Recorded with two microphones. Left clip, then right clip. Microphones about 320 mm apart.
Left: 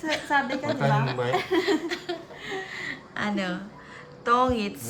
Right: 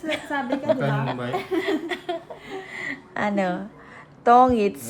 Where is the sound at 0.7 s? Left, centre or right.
Centre.